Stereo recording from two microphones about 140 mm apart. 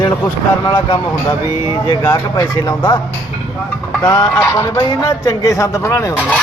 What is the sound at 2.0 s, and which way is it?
Speech, 20° left (ahead or behind).